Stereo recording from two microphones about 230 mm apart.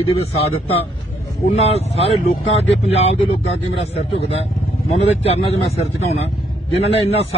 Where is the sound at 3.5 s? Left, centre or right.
Left.